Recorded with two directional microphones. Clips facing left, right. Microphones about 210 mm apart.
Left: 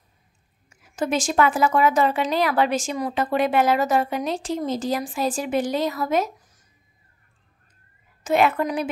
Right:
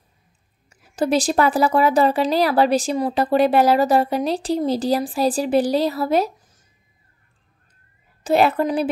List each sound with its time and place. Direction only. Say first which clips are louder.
0.7 s a woman's voice: right 5 dB; 35° right (ahead or behind)
8.2 s a woman's voice: right 3 dB; 35° right (ahead or behind)